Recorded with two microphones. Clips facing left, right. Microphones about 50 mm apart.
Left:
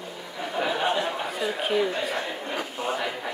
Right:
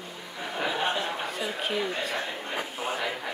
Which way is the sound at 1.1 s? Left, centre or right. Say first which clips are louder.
Left 3 dB; centre.